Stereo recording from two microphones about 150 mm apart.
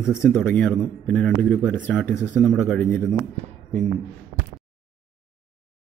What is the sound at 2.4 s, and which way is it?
Speech, centre (ahead or behind).